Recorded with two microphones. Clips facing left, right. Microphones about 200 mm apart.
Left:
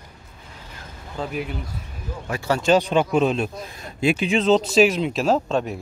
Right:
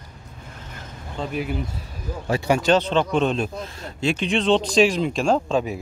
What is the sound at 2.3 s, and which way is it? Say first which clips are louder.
Speech: right 3 dB; 20° right (ahead or behind).